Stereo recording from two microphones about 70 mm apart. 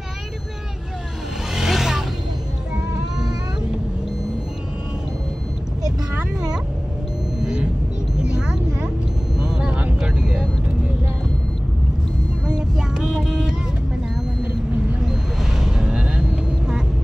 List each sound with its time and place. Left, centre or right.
1.5 s vehicle: centre
6.1 s a sound: centre
7.4 s vehicle: centre
8.2 s a sound: centre
9.4 s vehicle: centre
12.4 s vehicle: centre
15.0 s vehicle: centre